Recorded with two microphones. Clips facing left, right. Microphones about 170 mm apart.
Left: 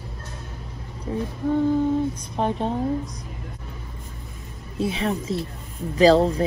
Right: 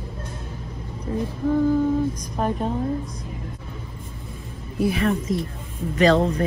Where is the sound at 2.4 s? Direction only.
25° left (ahead or behind).